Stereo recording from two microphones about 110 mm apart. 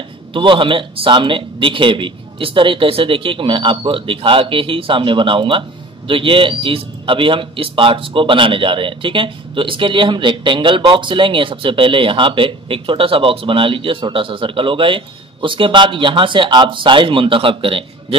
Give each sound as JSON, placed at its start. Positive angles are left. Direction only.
{"t": 0.3, "sound": "a man's voice", "side_deg": -50}